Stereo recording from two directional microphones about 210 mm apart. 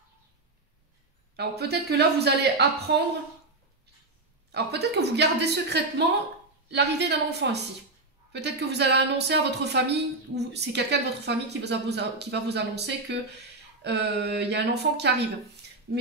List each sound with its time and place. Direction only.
1.3 s speech: 50° right (ahead or behind)
4.5 s speech: 50° right (ahead or behind)